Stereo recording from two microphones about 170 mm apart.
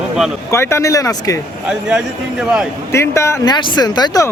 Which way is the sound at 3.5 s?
25° left (ahead or behind).